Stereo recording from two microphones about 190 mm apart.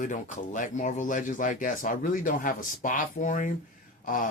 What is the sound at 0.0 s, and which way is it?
Speech, 45° left (ahead or behind).